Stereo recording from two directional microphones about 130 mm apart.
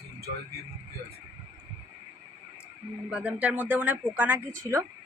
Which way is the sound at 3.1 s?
10° right (ahead or behind).